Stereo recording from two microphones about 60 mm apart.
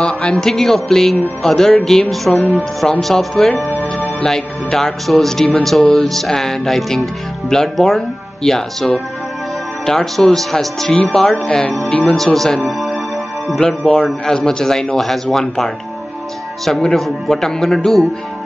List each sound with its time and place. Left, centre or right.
0.0 s speech: centre
3.6 s music: left
4.2 s speech: centre
12.6 s music: centre
13.5 s speech: centre